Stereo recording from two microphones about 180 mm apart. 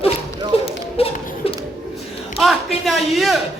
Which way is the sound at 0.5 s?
35° left (ahead or behind).